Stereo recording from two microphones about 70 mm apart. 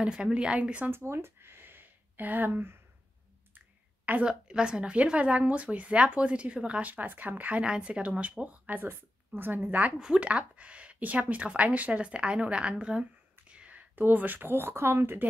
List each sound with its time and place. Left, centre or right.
0.0 s a woman's voice: centre
0.8 s a woman's voice: right
8.8 s a woman's voice: right